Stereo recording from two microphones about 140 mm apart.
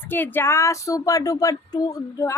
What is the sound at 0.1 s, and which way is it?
Speech, 15° left (ahead or behind).